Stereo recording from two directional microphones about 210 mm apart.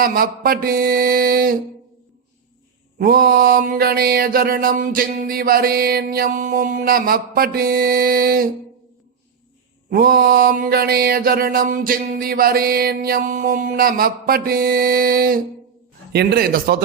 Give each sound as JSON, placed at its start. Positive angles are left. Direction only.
{"t": 0.0, "sound": "mantra", "side_deg": -45}
{"t": 3.0, "sound": "mantra", "side_deg": -45}
{"t": 9.9, "sound": "mantra", "side_deg": -45}